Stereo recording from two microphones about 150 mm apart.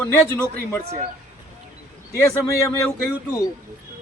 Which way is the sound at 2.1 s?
20° left (ahead or behind).